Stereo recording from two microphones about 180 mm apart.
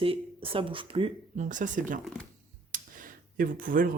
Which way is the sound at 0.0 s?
30° right (ahead or behind).